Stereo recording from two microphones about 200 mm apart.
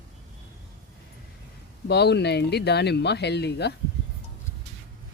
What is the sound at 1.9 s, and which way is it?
Speech, 55° left (ahead or behind).